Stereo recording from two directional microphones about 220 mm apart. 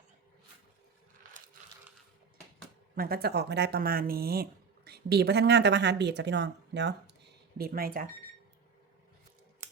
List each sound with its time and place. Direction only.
2.9 s speech: 45° right (ahead or behind)
7.6 s speech: 40° right (ahead or behind)